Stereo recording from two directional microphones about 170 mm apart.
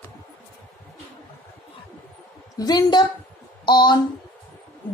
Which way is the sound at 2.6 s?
25° left (ahead or behind).